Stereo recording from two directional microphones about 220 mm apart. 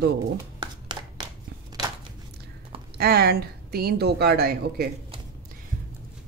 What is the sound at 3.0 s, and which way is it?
A woman's voice, 45° right (ahead or behind).